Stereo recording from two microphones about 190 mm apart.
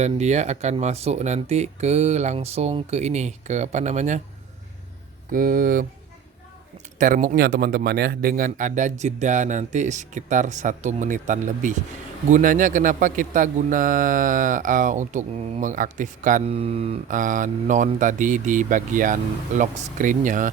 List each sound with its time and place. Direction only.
0.0 s a man's voice: 35° right (ahead or behind)
5.3 s a man's voice: 45° right (ahead or behind)
7.0 s a man's voice: 40° right (ahead or behind)